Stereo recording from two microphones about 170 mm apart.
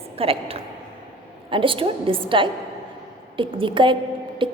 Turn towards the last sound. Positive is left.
turn(degrees=-30)  # may be behind; listen again after turning